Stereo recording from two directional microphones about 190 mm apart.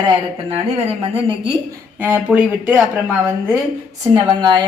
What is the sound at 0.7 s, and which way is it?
Speech, 30° right (ahead or behind).